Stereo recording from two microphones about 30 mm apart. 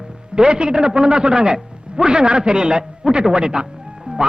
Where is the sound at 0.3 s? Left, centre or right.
Right.